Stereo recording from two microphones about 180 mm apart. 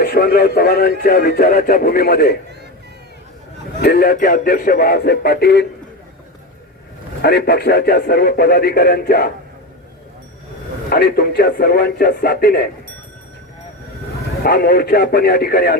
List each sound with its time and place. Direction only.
0.0 s speech: 60° left (ahead or behind)
3.8 s speech: 60° left (ahead or behind)
7.2 s speech: 65° left (ahead or behind)
10.8 s speech: 60° left (ahead or behind)
14.4 s speech: 60° left (ahead or behind)